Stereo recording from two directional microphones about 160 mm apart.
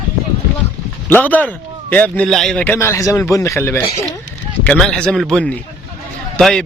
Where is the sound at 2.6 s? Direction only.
15° left (ahead or behind).